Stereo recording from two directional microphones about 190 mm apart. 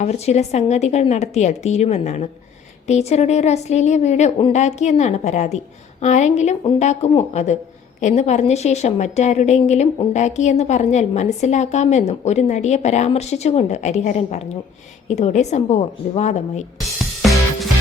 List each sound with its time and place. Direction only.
0.0 s a woman's voice: 35° left (ahead or behind)
17.0 s music: centre (ahead or behind)